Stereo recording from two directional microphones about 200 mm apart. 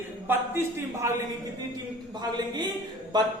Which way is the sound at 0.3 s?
10° right (ahead or behind).